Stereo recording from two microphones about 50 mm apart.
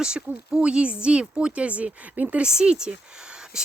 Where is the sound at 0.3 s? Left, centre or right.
Right.